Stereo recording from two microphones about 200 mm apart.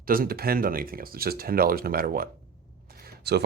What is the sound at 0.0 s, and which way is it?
Speech, 45° right (ahead or behind).